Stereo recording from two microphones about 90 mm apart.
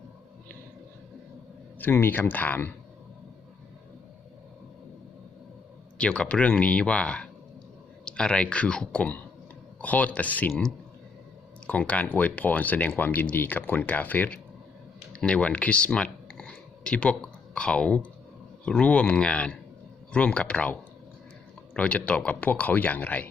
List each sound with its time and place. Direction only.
1.8 s speech: 25° left (ahead or behind)
6.0 s speech: 10° left (ahead or behind)
11.6 s speech: 15° left (ahead or behind)